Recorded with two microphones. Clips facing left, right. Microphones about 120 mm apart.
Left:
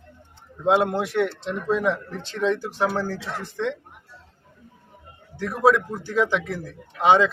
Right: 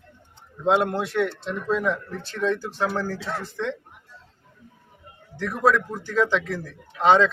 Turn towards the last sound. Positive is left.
turn(degrees=10)  # may be behind; listen again after turning